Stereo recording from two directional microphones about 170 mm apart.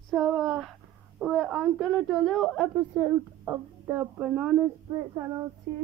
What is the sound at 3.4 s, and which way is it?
Speech, 15° right (ahead or behind).